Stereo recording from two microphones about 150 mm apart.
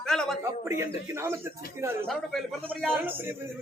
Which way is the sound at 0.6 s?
20° right (ahead or behind).